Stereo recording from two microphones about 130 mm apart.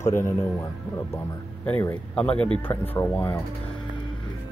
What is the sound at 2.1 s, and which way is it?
Speech, 10° left (ahead or behind).